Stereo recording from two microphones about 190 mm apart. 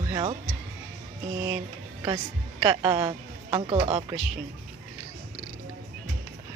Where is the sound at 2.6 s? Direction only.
20° right (ahead or behind).